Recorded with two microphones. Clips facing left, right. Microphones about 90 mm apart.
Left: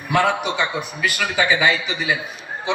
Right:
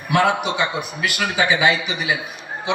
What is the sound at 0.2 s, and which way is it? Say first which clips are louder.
A man's voice: right 1 dB; 10° right (ahead or behind).